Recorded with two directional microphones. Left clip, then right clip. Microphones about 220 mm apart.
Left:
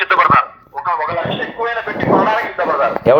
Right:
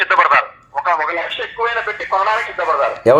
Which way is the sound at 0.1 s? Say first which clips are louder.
Left 3 dB; 25° right (ahead or behind).